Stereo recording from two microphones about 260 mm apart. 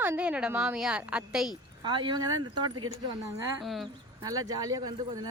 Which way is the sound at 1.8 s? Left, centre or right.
Centre.